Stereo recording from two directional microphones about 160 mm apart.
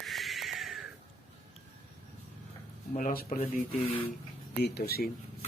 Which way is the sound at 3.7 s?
35° left (ahead or behind).